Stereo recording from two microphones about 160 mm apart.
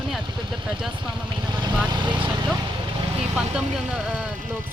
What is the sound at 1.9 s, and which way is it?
Speech, 30° right (ahead or behind).